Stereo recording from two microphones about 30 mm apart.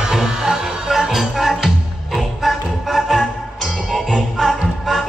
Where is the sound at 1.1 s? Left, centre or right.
Centre.